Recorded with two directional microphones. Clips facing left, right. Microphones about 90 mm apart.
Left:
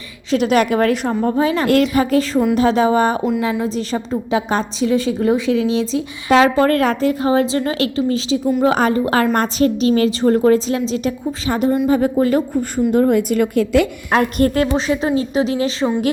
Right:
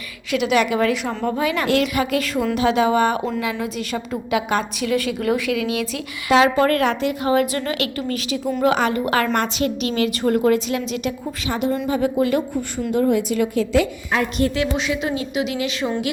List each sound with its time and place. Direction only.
0.3 s a woman's voice: 40° left (ahead or behind)
1.2 s a woman's voice: 30° left (ahead or behind)
1.6 s a woman's voice: 45° left (ahead or behind)
1.9 s a woman's voice: 35° left (ahead or behind)
6.3 s a woman's voice: 35° left (ahead or behind)